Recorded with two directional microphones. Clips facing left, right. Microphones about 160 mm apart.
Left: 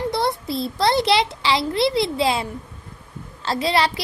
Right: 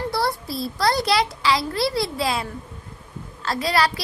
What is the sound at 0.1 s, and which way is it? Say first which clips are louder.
A woman's voice: left 2 dB; 20° left (ahead or behind).